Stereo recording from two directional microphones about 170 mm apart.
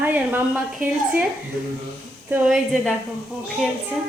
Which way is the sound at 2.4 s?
Centre (ahead or behind).